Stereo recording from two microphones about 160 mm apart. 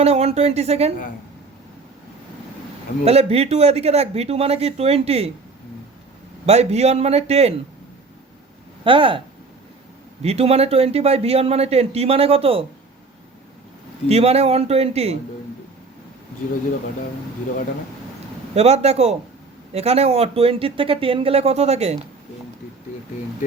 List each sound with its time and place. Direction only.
0.0 s speech: 40° right (ahead or behind)
3.0 s a man's voice: 40° right (ahead or behind)
6.4 s a man's voice: 40° right (ahead or behind)
8.8 s speech: 30° right (ahead or behind)
10.2 s a man's voice: 40° right (ahead or behind)
14.1 s a man's voice: 40° right (ahead or behind)
18.5 s a man's voice: 40° right (ahead or behind)